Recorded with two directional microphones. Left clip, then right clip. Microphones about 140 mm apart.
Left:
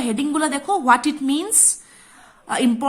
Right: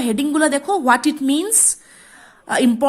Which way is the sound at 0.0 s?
35° right (ahead or behind).